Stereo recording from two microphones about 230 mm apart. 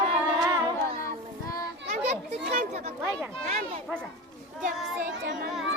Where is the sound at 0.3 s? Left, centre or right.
Centre.